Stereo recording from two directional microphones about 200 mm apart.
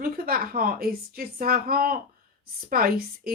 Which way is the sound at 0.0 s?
45° right (ahead or behind).